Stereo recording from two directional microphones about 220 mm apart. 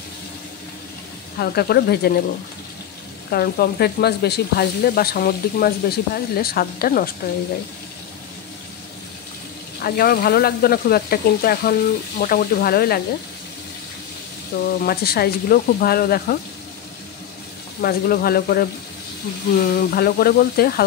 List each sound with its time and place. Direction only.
1.4 s speech: 45° left (ahead or behind)
3.3 s speech: 45° left (ahead or behind)
9.8 s speech: 45° left (ahead or behind)
14.8 s speech: 45° left (ahead or behind)
17.8 s speech: 45° left (ahead or behind)